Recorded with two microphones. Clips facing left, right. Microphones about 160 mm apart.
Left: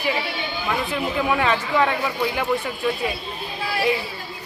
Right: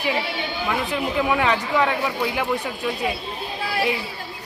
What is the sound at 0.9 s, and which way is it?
Speech, 10° right (ahead or behind).